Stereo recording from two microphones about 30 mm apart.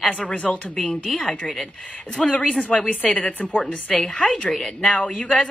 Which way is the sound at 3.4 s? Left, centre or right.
Left.